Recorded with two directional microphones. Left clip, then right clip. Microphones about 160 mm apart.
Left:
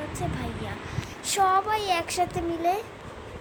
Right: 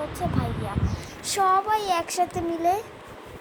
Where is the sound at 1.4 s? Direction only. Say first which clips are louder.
Right 1 dB; 5° right (ahead or behind).